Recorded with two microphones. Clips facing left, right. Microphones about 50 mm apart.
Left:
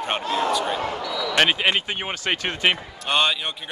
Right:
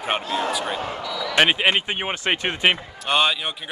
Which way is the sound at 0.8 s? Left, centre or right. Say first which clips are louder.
Left 2 dB; left.